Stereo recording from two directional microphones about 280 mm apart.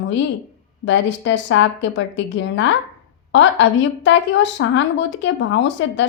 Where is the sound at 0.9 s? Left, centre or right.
Left.